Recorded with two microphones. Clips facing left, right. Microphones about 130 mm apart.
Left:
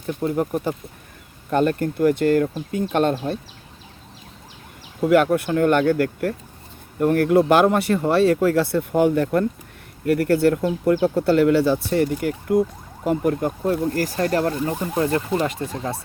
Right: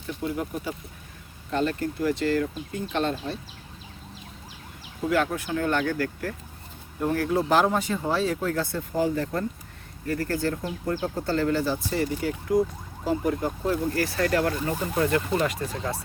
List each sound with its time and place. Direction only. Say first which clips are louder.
0.1 s speech: left 7 dB; 50° left (ahead or behind)
5.0 s speech: left 8 dB; 60° left (ahead or behind)
7.0 s speech: left 8 dB; 60° left (ahead or behind)
13.7 s speech: left 4 dB; 40° left (ahead or behind)